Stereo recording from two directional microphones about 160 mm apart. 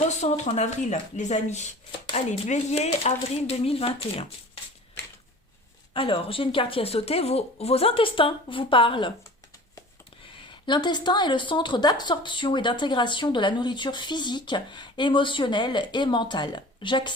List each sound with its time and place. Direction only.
0.1 s a woman's voice: 45° left (ahead or behind)
5.9 s a woman's voice: 35° left (ahead or behind)
10.5 s speech: 30° left (ahead or behind)